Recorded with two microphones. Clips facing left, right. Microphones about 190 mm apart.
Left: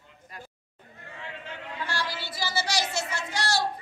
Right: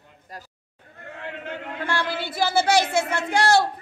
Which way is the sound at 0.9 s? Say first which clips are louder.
Right 6 dB; 55° right (ahead or behind).